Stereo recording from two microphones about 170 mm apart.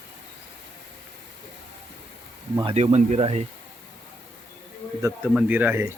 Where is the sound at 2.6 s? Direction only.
35° right (ahead or behind).